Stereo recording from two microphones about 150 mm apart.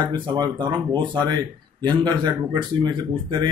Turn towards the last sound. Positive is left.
turn(degrees=-30)  # may be behind; listen again after turning